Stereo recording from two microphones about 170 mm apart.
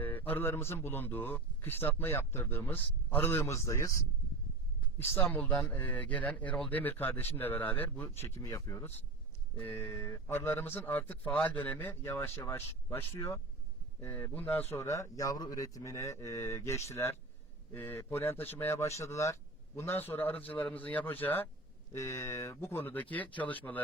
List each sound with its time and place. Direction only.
0.0 s a man's voice: 10° left (ahead or behind)
4.9 s a man's voice: 10° left (ahead or behind)